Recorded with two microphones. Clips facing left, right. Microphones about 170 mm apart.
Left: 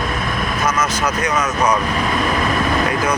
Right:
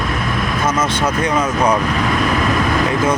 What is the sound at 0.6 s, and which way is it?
Speech, 25° right (ahead or behind).